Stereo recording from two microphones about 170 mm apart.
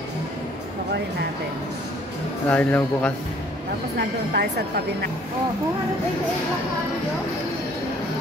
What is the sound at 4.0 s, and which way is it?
A woman's voice, 75° right (ahead or behind).